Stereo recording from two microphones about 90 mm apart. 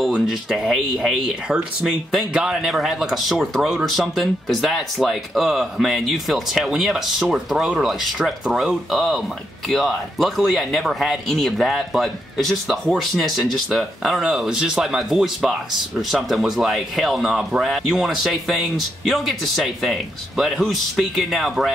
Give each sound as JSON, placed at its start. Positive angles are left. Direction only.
{"t": 0.0, "sound": "speech", "side_deg": -5}